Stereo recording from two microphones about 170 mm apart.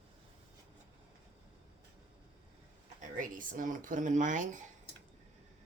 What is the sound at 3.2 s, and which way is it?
Speech, 50° right (ahead or behind).